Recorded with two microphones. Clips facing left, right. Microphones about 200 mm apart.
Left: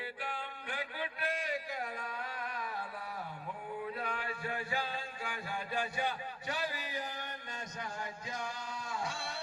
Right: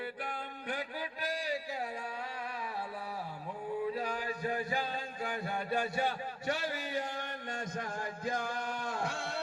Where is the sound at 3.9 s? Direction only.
35° right (ahead or behind).